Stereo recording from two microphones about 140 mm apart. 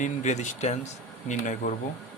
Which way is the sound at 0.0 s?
60° left (ahead or behind).